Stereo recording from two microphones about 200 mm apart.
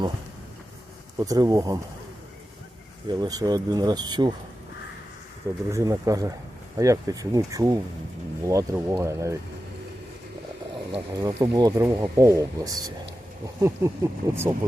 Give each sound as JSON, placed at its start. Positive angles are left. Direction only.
{"t": 1.2, "sound": "speech", "side_deg": -15}
{"t": 3.1, "sound": "speech", "side_deg": -20}
{"t": 5.7, "sound": "speech", "side_deg": -15}
{"t": 10.9, "sound": "speech", "side_deg": -20}